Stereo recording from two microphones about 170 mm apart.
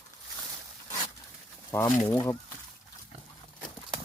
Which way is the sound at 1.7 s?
15° left (ahead or behind).